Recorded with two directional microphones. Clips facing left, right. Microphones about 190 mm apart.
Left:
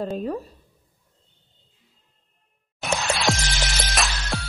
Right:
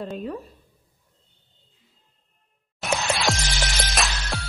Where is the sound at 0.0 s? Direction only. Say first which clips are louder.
Left 4 dB; 40° left (ahead or behind).